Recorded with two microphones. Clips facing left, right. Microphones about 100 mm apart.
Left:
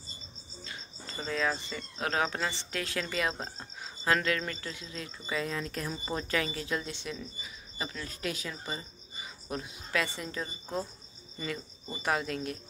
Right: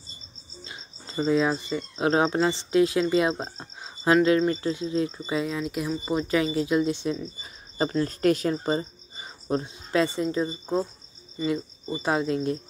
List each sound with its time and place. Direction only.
0.7 s speech: 20° right (ahead or behind)
7.4 s speech: 40° right (ahead or behind)
10.0 s speech: 20° right (ahead or behind)